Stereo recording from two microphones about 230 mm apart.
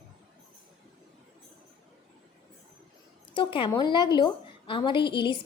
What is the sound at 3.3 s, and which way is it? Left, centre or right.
A woman's voice, left.